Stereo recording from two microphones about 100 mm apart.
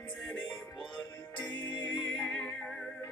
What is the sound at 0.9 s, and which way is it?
Music, 50° left (ahead or behind).